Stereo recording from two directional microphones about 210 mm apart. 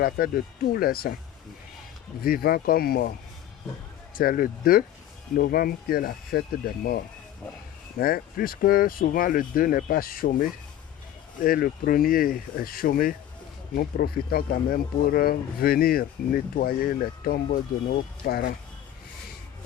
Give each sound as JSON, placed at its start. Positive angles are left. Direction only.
{"t": 0.0, "sound": "speech", "side_deg": 45}
{"t": 2.2, "sound": "speech", "side_deg": 45}
{"t": 7.9, "sound": "speech", "side_deg": 45}